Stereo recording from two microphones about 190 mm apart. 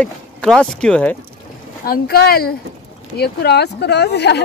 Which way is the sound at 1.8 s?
55° left (ahead or behind).